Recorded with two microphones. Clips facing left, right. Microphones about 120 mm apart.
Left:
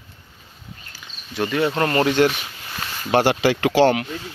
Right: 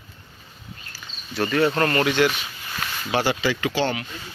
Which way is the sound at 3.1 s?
60° left (ahead or behind).